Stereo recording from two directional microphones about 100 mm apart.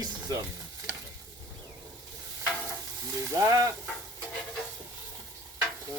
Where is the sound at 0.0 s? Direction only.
45° right (ahead or behind).